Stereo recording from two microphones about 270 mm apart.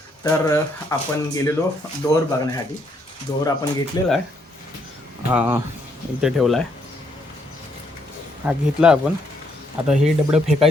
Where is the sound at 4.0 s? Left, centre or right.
Centre.